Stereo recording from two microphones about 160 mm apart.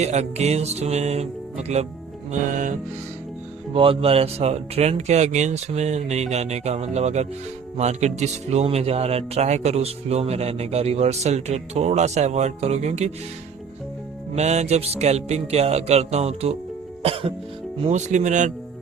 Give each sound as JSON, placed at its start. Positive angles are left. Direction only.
{"t": 0.0, "sound": "speech", "side_deg": -45}
{"t": 3.7, "sound": "speech", "side_deg": -35}
{"t": 14.3, "sound": "music", "side_deg": -45}
{"t": 17.8, "sound": "speech", "side_deg": -45}